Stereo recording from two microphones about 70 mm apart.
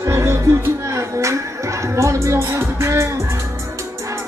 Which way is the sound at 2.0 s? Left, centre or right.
Right.